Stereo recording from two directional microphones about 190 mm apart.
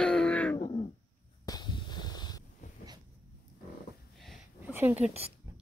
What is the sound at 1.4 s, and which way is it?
Wheeze, 20° left (ahead or behind).